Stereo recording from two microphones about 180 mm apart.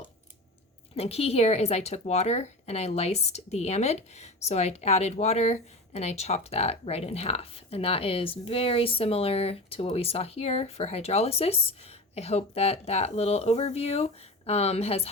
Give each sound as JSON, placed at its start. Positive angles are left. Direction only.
{"t": 0.9, "sound": "speech", "side_deg": 35}